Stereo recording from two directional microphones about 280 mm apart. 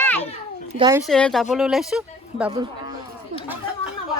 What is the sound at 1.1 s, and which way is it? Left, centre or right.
Speech, centre.